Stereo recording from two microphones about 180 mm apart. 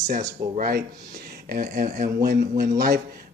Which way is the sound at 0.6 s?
60° right (ahead or behind).